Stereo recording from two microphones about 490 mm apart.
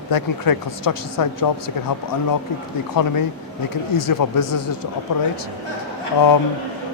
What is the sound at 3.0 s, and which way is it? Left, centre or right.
Speech, left.